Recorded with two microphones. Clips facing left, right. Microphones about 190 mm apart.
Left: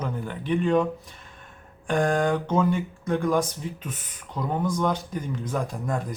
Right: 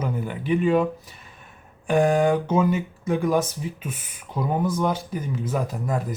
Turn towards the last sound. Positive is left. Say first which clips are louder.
# right 2 dB
turn(degrees=-5)  # may be behind; listen again after turning